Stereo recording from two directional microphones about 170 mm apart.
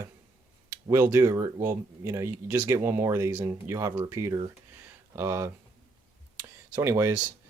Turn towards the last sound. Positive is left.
turn(degrees=-15)  # may be behind; listen again after turning